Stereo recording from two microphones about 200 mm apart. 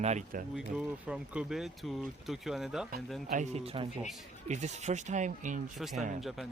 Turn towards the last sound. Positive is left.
turn(degrees=0)  # may be behind; listen again after turning